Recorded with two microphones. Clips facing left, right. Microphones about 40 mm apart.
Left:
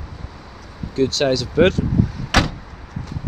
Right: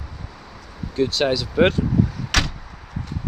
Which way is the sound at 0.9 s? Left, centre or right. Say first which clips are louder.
Left 2 dB; centre.